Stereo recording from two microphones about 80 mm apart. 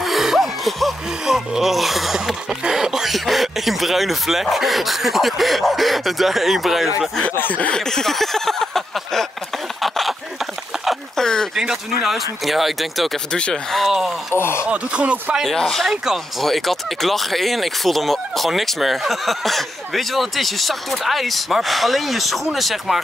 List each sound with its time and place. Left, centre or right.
0.0 s speech: centre
7.3 s a sound: left; by 11.2 s centre
11.5 s speech: centre
14.3 s speech: left
14.7 s speech: centre
15.4 s speech: centre